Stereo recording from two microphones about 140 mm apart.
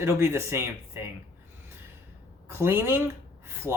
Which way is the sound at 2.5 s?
15° right (ahead or behind).